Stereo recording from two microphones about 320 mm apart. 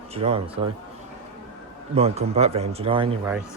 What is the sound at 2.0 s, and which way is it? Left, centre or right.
Speech, centre.